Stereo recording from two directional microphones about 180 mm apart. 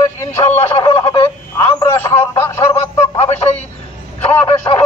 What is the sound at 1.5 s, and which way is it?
Telephone, 20° left (ahead or behind).